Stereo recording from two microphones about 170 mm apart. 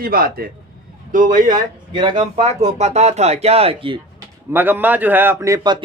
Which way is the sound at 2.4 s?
40° right (ahead or behind).